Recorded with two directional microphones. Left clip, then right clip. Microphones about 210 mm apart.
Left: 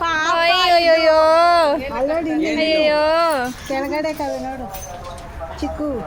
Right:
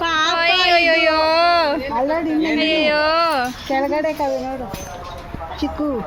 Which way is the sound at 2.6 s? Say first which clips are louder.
Left 2 dB; 15° left (ahead or behind).